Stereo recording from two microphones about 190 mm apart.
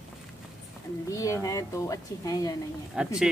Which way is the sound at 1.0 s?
15° left (ahead or behind).